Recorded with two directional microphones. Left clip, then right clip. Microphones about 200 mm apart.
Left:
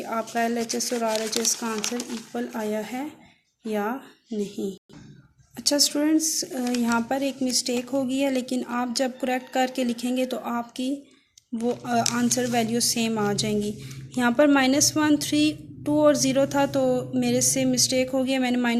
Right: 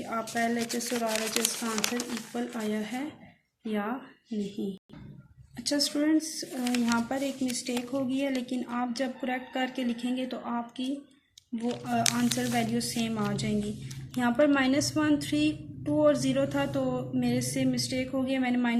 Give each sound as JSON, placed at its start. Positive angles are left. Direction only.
{"t": 0.0, "sound": "a woman's voice", "side_deg": 50}
{"t": 1.2, "sound": "speech", "side_deg": -15}
{"t": 2.3, "sound": "a woman's voice", "side_deg": 50}